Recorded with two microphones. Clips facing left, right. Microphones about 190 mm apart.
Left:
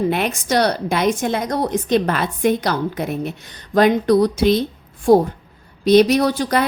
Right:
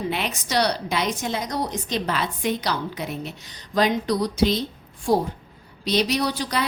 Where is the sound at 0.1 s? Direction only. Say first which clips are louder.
Left 6 dB; 50° left (ahead or behind).